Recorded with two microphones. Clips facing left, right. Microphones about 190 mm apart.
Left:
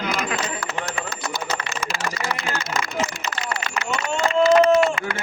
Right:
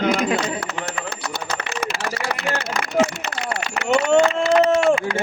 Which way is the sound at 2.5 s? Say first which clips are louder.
Right 4 dB; 65° right (ahead or behind).